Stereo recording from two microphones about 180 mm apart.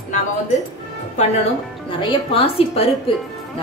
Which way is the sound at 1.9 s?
30° left (ahead or behind).